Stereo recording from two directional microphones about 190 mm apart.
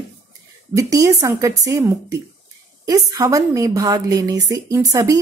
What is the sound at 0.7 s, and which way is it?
A woman's voice, 15° right (ahead or behind).